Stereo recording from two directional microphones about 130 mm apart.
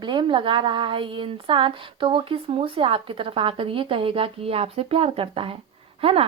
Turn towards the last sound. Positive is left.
turn(degrees=-45)  # may be behind; listen again after turning